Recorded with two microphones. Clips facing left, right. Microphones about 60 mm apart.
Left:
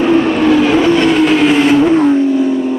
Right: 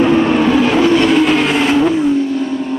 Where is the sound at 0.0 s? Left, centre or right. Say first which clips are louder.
Left 1 dB; centre.